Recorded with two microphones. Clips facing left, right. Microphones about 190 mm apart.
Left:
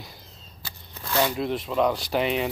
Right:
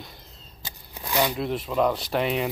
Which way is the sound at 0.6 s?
15° right (ahead or behind).